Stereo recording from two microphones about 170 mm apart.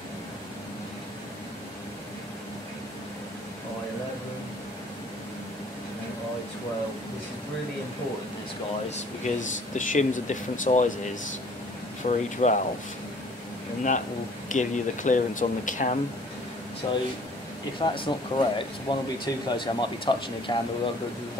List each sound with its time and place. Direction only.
9.2 s speech: 45° left (ahead or behind)
12.0 s speech: 45° left (ahead or behind)
14.5 s speech: 50° left (ahead or behind)
16.8 s speech: 30° left (ahead or behind)